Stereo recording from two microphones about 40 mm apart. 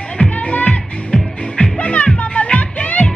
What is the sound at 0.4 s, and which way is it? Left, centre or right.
Music, left.